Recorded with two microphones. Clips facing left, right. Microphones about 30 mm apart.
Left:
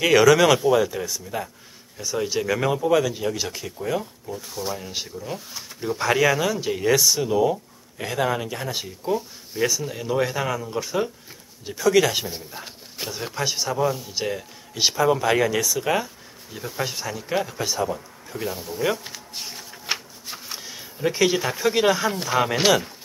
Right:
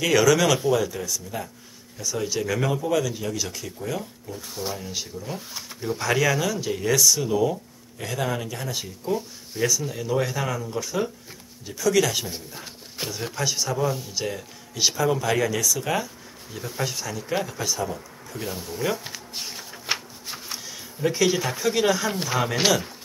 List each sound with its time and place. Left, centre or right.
0.0 s speech: centre
4.3 s speech: centre
8.8 s speech: centre
12.3 s speech: centre
14.1 s speech: centre
18.9 s shuffling cards: centre
20.5 s speech: centre
22.1 s speech: centre